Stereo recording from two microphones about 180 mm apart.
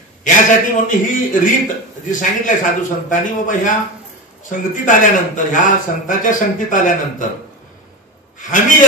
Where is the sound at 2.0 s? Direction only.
45° left (ahead or behind).